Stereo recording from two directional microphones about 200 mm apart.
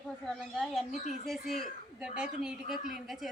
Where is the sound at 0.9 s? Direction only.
35° left (ahead or behind).